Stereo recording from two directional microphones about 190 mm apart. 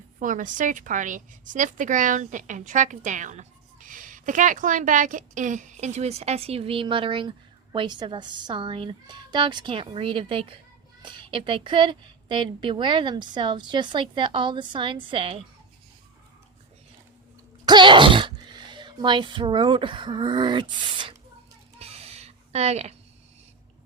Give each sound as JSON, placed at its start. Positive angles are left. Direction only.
{"t": 0.2, "sound": "a woman's voice", "side_deg": -45}
{"t": 17.7, "sound": "speech", "side_deg": -25}
{"t": 21.8, "sound": "a sound", "side_deg": -30}